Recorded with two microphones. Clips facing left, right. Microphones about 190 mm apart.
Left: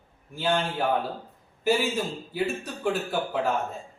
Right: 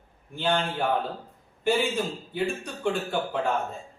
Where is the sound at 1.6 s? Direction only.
5° left (ahead or behind).